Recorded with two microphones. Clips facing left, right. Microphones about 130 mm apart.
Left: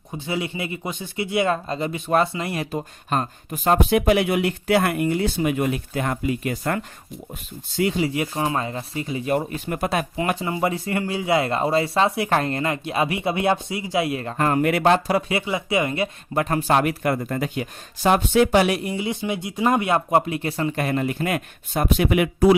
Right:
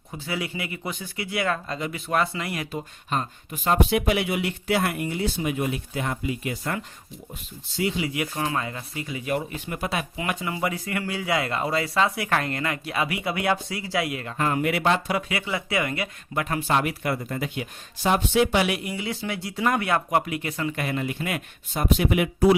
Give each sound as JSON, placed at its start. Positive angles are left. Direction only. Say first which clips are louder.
{"t": 0.3, "sound": "speech", "louder": "left 4 dB", "side_deg": 25}
{"t": 2.7, "sound": "speech", "louder": "left 4 dB", "side_deg": 45}
{"t": 7.9, "sound": "speech", "louder": "left 4 dB", "side_deg": 35}
{"t": 15.4, "sound": "speech", "louder": "left 4 dB", "side_deg": 20}
{"t": 18.9, "sound": "speech", "louder": "left 5 dB", "side_deg": 20}